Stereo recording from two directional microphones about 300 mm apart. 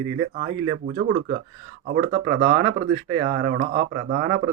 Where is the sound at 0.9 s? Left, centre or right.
Right.